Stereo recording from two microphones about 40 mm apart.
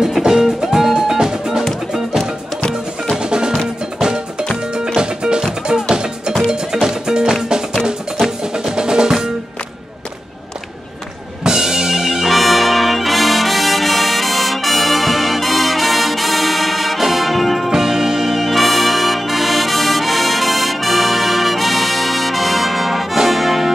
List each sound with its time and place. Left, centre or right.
0.3 s music: centre
3.2 s music: right
8.5 s music: centre
11.4 s brass instrument: centre
17.6 s music: centre